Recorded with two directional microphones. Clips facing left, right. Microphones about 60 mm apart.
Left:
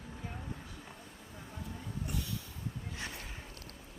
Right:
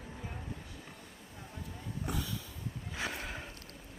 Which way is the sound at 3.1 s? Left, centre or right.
Right.